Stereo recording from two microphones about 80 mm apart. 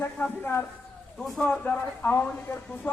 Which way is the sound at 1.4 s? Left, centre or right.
Centre.